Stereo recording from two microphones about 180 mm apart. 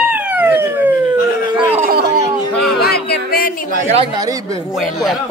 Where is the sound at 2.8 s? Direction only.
60° left (ahead or behind).